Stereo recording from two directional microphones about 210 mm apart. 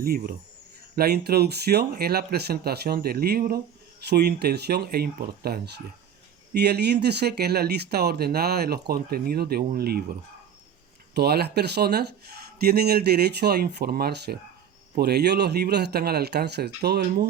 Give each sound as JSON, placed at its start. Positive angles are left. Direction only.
{"t": 0.0, "sound": "speech", "side_deg": -45}